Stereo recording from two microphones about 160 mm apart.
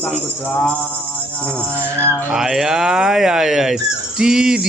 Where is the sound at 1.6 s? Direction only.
5° left (ahead or behind).